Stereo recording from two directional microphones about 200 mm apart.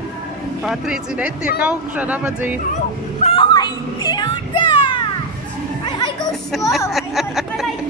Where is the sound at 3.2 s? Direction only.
30° left (ahead or behind).